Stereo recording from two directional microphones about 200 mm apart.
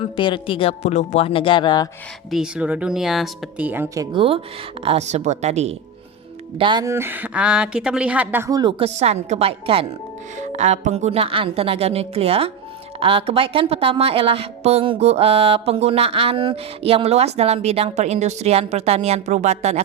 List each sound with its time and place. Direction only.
0.2 s speech: 25° left (ahead or behind)
2.3 s a woman's voice: 5° right (ahead or behind); by 5.7 s 35° right (ahead or behind)
6.6 s a woman's voice: 20° right (ahead or behind)
9.0 s speech: 35° right (ahead or behind)